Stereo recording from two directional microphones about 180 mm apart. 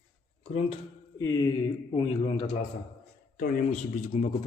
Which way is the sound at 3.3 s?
55° left (ahead or behind).